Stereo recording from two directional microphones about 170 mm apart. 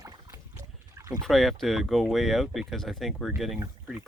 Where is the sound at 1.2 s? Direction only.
Centre (ahead or behind).